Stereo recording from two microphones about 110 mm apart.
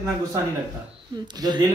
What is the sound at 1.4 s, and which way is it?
Speech, 40° right (ahead or behind).